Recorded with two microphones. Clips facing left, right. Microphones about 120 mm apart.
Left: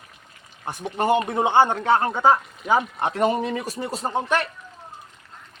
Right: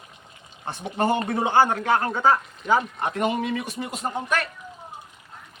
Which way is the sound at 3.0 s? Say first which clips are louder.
Left 3 dB; 35° left (ahead or behind).